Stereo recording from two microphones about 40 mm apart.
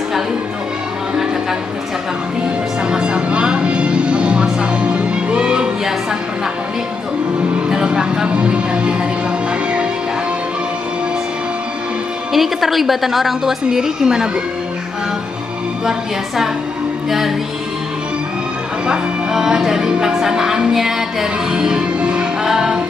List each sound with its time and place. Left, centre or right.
2.9 s music: right
7.6 s music: right
12.3 s a woman's voice: centre
15.8 s music: centre
18.9 s music: centre